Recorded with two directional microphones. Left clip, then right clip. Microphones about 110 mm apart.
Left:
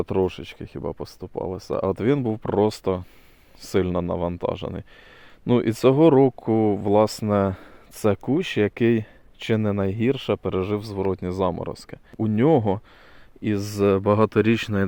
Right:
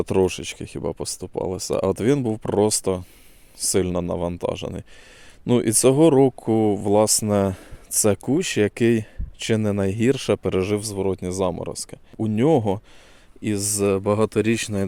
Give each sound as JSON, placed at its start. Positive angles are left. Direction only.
{"t": 0.0, "sound": "speech", "side_deg": -90}
{"t": 2.0, "sound": "speech", "side_deg": -40}
{"t": 10.1, "sound": "speech", "side_deg": -75}
{"t": 10.8, "sound": "speech", "side_deg": -35}
{"t": 13.7, "sound": "speech", "side_deg": 0}